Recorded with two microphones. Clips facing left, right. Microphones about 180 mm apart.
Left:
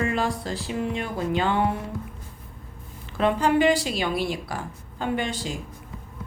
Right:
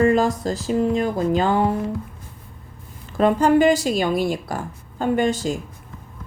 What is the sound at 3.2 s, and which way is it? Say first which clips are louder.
A woman's voice: right 5 dB; 45° right (ahead or behind).